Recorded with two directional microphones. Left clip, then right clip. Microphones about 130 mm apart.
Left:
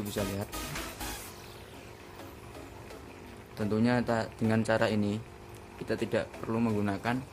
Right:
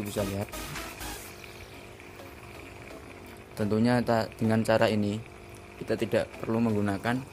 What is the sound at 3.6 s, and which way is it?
Speech, 25° right (ahead or behind).